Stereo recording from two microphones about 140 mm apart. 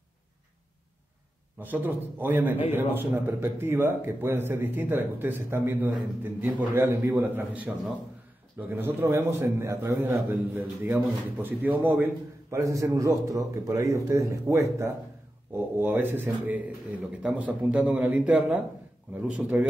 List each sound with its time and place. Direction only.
1.6 s a man's voice: 15° right (ahead or behind)